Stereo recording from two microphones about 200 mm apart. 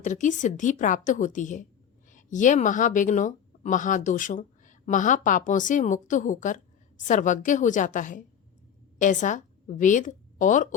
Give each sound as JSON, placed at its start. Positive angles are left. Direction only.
{"t": 0.0, "sound": "a woman's voice", "side_deg": 40}